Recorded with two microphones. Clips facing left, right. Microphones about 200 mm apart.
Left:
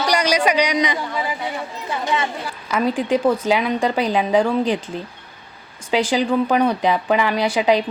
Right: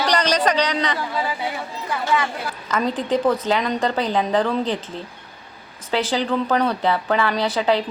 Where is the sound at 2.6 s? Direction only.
10° left (ahead or behind).